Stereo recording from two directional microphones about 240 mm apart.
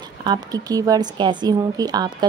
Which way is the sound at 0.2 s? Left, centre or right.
Centre.